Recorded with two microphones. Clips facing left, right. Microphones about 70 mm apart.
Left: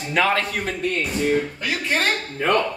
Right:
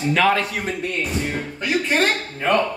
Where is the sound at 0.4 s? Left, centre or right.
Left.